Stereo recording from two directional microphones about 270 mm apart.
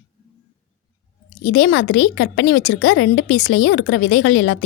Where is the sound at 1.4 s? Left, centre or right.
Left.